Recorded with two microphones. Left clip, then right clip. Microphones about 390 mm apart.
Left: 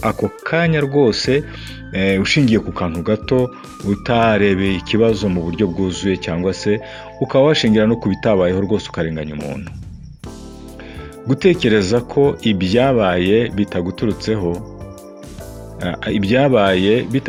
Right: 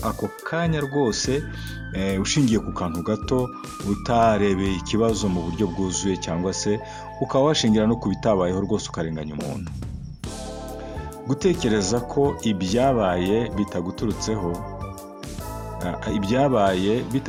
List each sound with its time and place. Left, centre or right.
0.0 s speech: right
11.3 s speech: right
15.8 s speech: right